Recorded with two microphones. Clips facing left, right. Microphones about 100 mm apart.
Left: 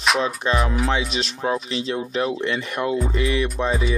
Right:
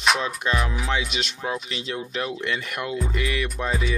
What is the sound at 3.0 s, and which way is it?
Music, 30° left (ahead or behind).